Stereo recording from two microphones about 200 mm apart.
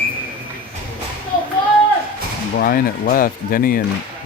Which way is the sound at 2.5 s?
45° left (ahead or behind).